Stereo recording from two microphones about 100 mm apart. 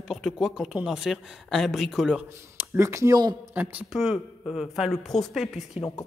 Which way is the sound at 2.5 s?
25° right (ahead or behind).